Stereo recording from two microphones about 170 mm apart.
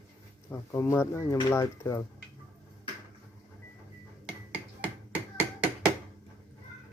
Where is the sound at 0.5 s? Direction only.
15° left (ahead or behind).